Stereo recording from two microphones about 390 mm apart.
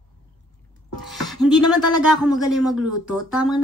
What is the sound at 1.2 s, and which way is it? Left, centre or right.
Music, centre.